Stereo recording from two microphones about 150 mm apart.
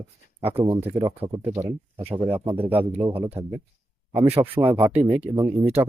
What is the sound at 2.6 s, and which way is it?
Speech, 40° right (ahead or behind).